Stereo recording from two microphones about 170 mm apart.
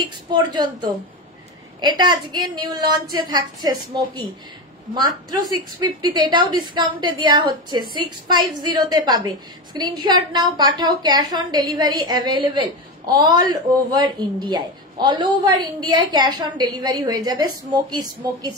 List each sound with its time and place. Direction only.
0.3 s a woman's voice: 25° right (ahead or behind)
1.8 s a woman's voice: 25° right (ahead or behind)